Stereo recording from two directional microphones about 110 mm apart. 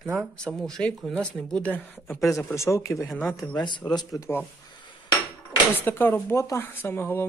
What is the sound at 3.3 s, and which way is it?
Speech, 40° left (ahead or behind).